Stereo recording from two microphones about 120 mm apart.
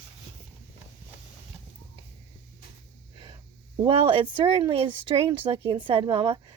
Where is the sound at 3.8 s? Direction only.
45° right (ahead or behind).